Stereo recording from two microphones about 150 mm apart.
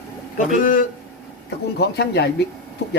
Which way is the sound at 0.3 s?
60° left (ahead or behind).